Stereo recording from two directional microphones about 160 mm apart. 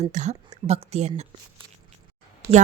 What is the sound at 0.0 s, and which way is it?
A woman's voice, 45° right (ahead or behind).